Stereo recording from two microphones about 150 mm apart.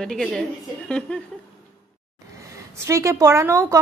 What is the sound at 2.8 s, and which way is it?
Speech, 20° right (ahead or behind).